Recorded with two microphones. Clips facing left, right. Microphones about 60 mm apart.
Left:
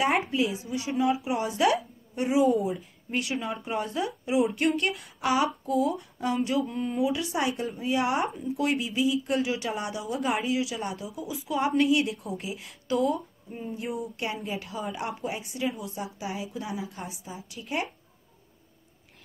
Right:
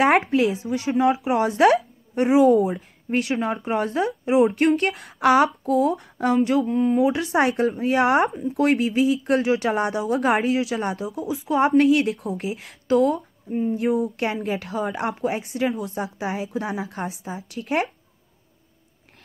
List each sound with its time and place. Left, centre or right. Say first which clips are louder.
0.0 s speech: right 7 dB; right
6.6 s speech: right 8 dB; right
8.0 s speech: right 9 dB; right
8.4 s speech: right 7 dB; right
13.5 s speech: right 13 dB; right
13.7 s speech: right 8 dB; right